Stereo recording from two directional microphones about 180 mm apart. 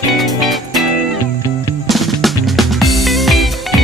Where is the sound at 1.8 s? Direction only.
Centre (ahead or behind).